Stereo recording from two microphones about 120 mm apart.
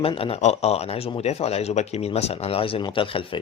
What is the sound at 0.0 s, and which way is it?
A man's voice, 50° left (ahead or behind).